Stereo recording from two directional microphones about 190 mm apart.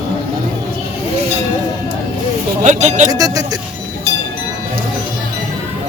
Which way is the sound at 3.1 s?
20° right (ahead or behind).